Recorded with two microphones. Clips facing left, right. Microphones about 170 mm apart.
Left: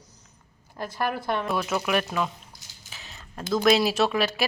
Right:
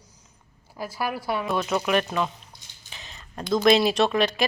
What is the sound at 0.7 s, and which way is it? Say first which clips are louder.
A woman's voice: left 1 dB; 5° right (ahead or behind).